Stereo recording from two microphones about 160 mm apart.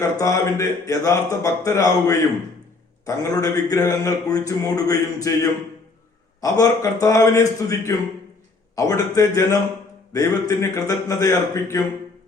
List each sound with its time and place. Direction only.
0.0 s speech: 20° left (ahead or behind)